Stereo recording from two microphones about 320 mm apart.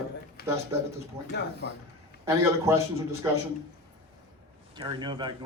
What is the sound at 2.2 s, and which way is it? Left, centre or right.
Speech, centre.